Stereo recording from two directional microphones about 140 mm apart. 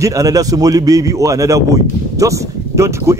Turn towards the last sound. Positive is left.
turn(degrees=-20)  # may be behind; listen again after turning